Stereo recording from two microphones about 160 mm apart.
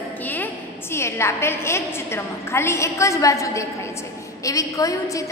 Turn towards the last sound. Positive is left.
turn(degrees=20)  # may be behind; listen again after turning